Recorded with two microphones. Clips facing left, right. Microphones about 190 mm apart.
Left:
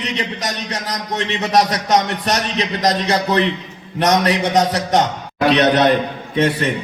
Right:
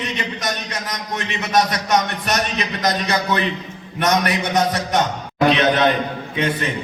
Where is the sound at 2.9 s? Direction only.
35° left (ahead or behind).